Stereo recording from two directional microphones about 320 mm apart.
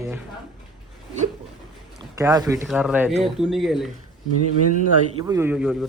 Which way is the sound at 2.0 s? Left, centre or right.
Centre.